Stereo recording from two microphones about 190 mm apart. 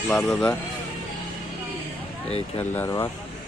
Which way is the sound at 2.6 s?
15° left (ahead or behind).